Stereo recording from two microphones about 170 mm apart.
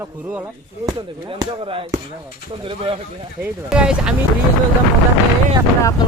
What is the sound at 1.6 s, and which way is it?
Speech, 35° right (ahead or behind).